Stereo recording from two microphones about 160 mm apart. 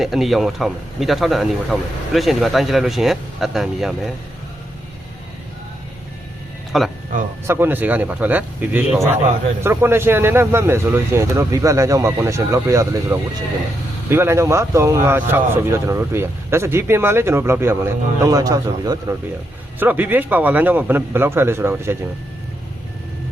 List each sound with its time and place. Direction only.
0.0 s speech: centre (ahead or behind)
6.7 s speech: centre (ahead or behind)
7.4 s speech: 15° right (ahead or behind)